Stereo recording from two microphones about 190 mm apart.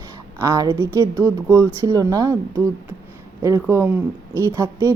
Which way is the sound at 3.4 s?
15° right (ahead or behind).